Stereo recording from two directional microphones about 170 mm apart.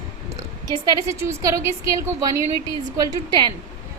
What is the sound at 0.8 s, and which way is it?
A woman's voice, 20° right (ahead or behind).